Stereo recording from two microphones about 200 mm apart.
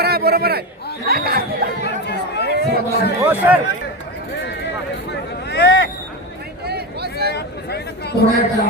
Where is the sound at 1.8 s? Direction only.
55° left (ahead or behind).